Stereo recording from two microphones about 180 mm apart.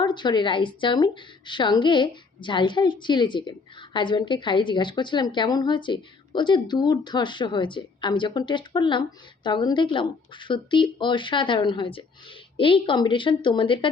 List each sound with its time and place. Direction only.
0.0 s a woman's voice: 25° left (ahead or behind)